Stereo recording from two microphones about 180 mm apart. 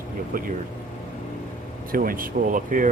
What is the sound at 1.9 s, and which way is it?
Speech, 50° right (ahead or behind).